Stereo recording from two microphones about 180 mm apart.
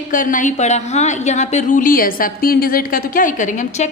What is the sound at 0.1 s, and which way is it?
A woman's voice, 50° left (ahead or behind).